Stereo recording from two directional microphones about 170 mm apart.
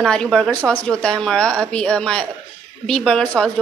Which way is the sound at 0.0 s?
Centre (ahead or behind).